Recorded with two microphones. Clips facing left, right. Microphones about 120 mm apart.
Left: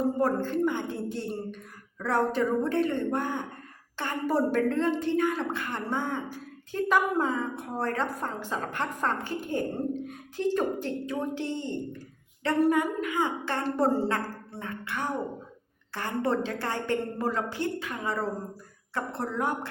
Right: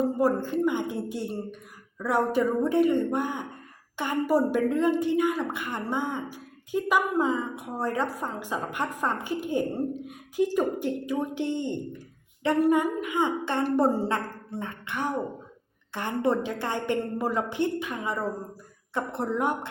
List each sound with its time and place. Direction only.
0.2 s a woman's voice: 10° right (ahead or behind)